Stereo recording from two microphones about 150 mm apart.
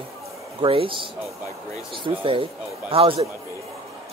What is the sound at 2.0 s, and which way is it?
Speech, 35° right (ahead or behind).